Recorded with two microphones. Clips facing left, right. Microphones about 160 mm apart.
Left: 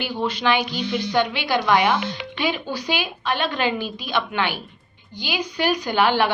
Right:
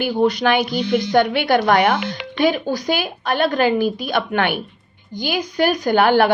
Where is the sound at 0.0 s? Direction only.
45° right (ahead or behind).